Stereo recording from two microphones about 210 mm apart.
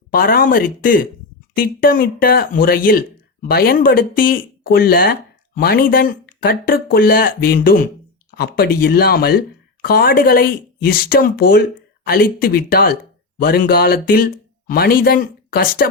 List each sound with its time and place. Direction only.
0.1 s speech: 45° left (ahead or behind)